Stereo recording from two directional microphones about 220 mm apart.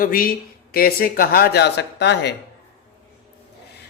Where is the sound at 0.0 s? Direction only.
40° left (ahead or behind).